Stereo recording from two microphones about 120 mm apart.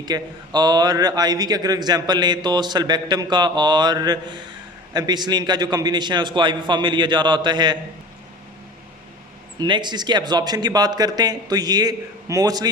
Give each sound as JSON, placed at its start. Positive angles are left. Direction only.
{"t": 0.0, "sound": "a man's voice", "side_deg": -35}
{"t": 9.6, "sound": "a man's voice", "side_deg": -40}